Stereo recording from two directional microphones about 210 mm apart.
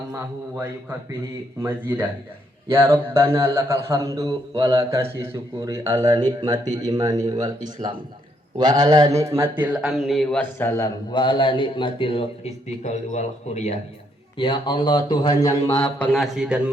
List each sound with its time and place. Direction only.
1.6 s a man's voice: 10° right (ahead or behind)
8.5 s a man's voice: 20° right (ahead or behind)